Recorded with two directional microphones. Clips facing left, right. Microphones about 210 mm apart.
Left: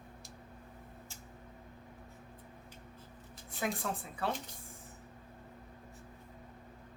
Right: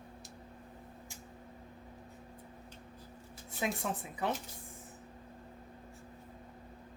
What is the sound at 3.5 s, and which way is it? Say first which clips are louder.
Speech: right 1 dB; 20° right (ahead or behind).